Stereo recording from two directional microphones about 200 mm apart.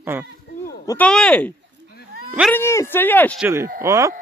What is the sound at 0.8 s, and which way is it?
Speech, 15° left (ahead or behind).